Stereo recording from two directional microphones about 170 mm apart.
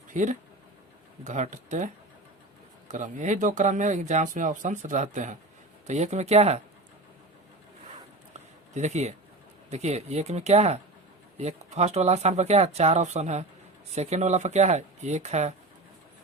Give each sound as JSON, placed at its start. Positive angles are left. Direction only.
{"t": 0.1, "sound": "speech", "side_deg": -50}
{"t": 2.9, "sound": "speech", "side_deg": -45}
{"t": 8.7, "sound": "speech", "side_deg": -45}